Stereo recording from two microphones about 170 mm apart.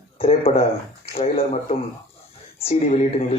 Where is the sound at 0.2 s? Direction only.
35° left (ahead or behind).